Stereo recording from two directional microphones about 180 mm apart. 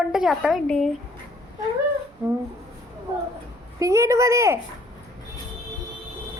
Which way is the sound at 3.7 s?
15° right (ahead or behind).